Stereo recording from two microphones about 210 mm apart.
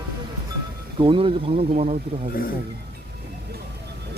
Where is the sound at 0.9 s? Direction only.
25° right (ahead or behind).